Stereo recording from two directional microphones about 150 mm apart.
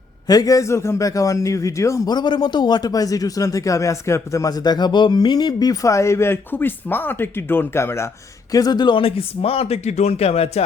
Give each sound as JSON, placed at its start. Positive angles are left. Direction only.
{"t": 0.3, "sound": "a man's voice", "side_deg": 25}